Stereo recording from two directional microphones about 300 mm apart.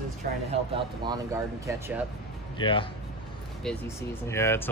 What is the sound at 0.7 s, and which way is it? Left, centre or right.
Speech, centre.